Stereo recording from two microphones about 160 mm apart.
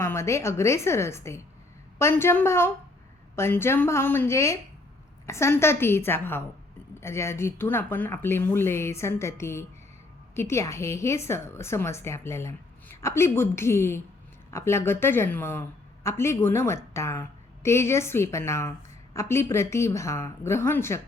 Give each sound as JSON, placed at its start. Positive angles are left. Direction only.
{"t": 0.0, "sound": "a woman's voice", "side_deg": 15}